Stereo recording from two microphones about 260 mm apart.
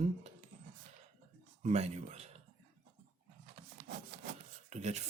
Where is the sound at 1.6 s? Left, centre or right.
Right.